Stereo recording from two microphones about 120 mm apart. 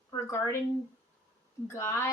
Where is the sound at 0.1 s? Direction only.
25° left (ahead or behind).